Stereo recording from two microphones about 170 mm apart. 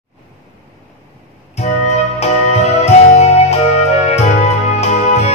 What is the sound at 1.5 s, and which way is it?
Music, 40° left (ahead or behind).